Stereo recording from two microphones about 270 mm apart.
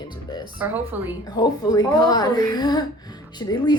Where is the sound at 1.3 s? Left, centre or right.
Centre.